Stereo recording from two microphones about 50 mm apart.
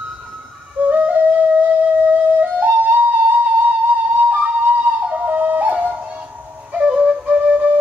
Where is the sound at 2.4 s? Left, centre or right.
Right.